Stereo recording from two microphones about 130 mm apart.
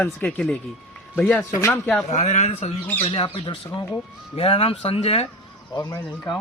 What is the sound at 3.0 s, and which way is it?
Speech, 40° left (ahead or behind).